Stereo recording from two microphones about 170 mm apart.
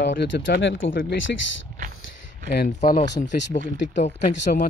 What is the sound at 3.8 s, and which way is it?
Speech, 45° left (ahead or behind).